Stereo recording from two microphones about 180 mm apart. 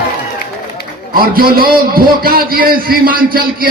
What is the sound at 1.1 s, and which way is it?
A man's voice, 55° right (ahead or behind).